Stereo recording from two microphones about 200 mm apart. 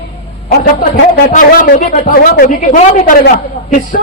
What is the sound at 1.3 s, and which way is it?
Speech, 40° left (ahead or behind).